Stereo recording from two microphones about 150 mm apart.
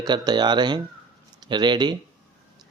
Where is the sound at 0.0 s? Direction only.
30° right (ahead or behind).